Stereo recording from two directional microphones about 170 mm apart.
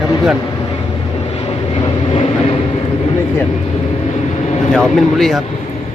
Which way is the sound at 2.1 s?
30° left (ahead or behind).